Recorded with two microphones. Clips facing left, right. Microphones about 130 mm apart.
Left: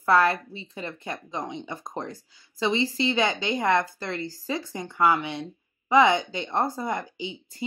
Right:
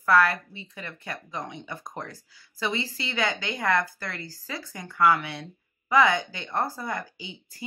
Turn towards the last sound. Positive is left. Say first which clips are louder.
# left 8 dB
turn(degrees=20)  # may be behind; listen again after turning